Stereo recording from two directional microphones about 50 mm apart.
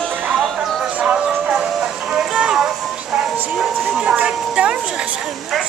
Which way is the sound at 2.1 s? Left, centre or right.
Centre.